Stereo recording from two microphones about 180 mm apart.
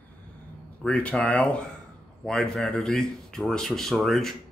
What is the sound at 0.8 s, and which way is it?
Speech, 5° left (ahead or behind).